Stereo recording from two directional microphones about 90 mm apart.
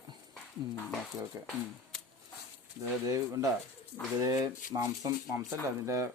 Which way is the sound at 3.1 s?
40° right (ahead or behind).